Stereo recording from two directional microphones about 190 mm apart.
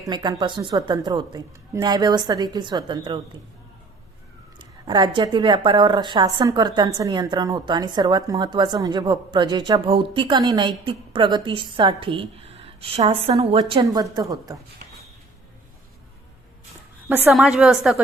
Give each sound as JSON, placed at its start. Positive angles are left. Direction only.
{"t": 0.1, "sound": "a woman's voice", "side_deg": -20}
{"t": 4.9, "sound": "a woman's voice", "side_deg": -25}
{"t": 17.1, "sound": "a woman's voice", "side_deg": -10}
{"t": 17.3, "sound": "a woman's voice", "side_deg": 0}